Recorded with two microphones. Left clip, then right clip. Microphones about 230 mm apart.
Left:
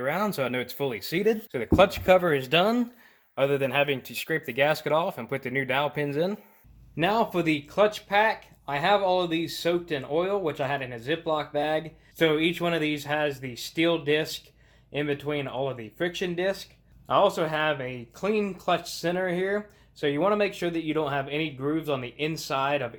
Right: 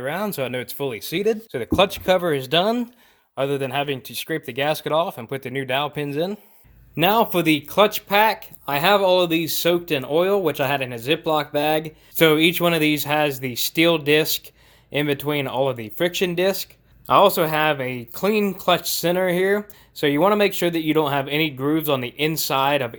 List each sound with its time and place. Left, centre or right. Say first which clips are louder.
0.0 s speech: right 2 dB; right